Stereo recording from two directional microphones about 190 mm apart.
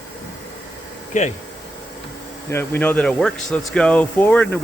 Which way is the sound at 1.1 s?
40° left (ahead or behind).